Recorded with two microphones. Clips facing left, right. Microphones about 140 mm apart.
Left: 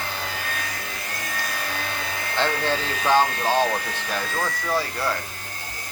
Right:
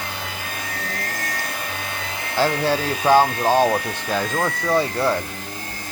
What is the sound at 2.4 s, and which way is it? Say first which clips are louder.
Speech: right 5 dB; 10° right (ahead or behind).